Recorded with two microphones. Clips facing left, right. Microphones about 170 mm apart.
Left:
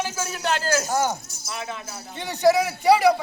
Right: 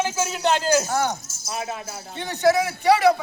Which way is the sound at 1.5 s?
45° right (ahead or behind).